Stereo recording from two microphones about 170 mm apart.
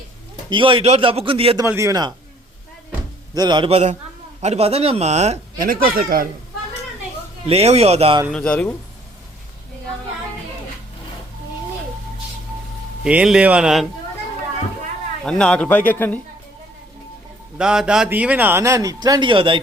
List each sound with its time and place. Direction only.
0.5 s a man's voice: 30° right (ahead or behind)
1.5 s a man's voice: 15° right (ahead or behind)
3.3 s a man's voice: 25° right (ahead or behind); by 5.6 s 40° right (ahead or behind)
5.6 s speech: 60° right (ahead or behind)
7.4 s a man's voice: 35° right (ahead or behind)
8.3 s a man's voice: 5° left (ahead or behind)
13.1 s speech: 5° right (ahead or behind)
15.2 s a man's voice: 5° left (ahead or behind)
17.6 s a man's voice: 5° right (ahead or behind); by 19.6 s 30° right (ahead or behind)